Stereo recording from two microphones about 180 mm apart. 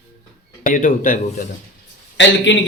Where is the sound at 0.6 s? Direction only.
50° left (ahead or behind).